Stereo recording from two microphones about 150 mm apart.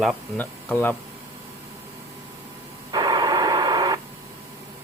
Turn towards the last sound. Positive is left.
turn(degrees=-25)  # may be behind; listen again after turning